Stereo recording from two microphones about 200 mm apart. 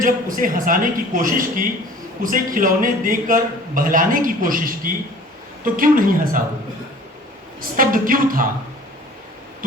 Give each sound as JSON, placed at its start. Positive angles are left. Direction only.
{"t": 0.0, "sound": "a man's voice", "side_deg": -45}
{"t": 7.8, "sound": "a man's voice", "side_deg": -45}